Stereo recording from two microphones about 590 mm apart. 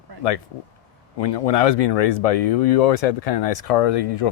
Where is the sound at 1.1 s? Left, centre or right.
Left.